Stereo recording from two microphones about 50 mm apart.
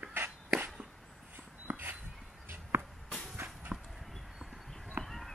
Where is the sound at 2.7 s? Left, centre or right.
Right.